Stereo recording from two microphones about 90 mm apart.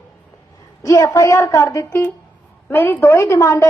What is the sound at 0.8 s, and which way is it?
A woman's voice, 40° left (ahead or behind).